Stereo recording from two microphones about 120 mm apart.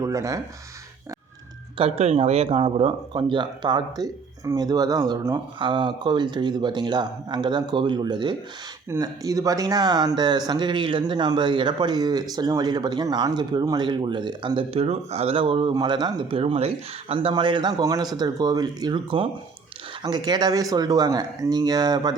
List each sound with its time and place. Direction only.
0.0 s speech: 25° right (ahead or behind)
1.8 s speech: 60° right (ahead or behind); by 5.2 s 35° right (ahead or behind)
5.5 s speech: 45° right (ahead or behind)
8.9 s speech: 30° right (ahead or behind); by 15.7 s 45° right (ahead or behind)
15.7 s speech: 35° right (ahead or behind)